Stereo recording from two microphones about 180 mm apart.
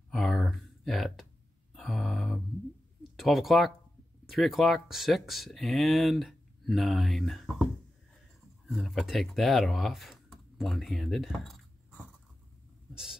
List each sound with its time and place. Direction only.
0.1 s a sound: centre (ahead or behind)
4.3 s speech: centre (ahead or behind)
8.6 s speech: centre (ahead or behind)